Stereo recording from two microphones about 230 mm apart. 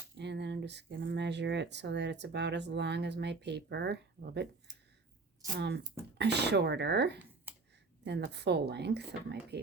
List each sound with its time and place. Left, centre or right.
0.2 s speech: right
5.5 s speech: right